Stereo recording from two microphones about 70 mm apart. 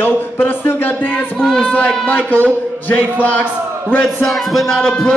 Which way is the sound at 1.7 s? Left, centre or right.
Left.